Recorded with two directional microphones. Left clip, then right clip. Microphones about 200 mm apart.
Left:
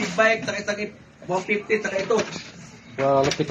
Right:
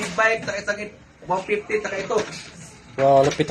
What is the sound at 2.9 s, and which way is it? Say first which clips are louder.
Speech: right 4 dB; 30° right (ahead or behind).